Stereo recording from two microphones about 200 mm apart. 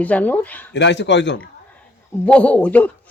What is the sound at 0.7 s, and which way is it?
Speech, 60° left (ahead or behind).